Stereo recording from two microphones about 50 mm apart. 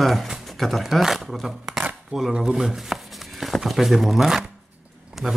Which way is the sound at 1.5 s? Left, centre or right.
Centre.